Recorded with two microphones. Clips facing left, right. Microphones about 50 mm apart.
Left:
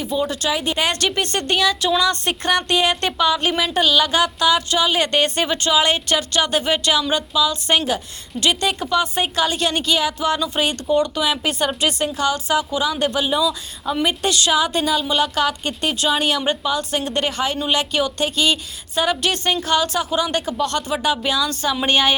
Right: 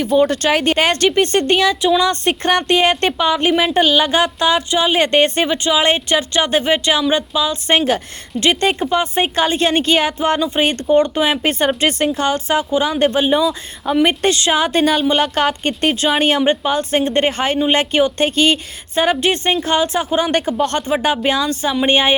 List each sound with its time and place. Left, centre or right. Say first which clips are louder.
0.1 s speech: right 7 dB; right
0.8 s a woman's voice: right 6 dB; right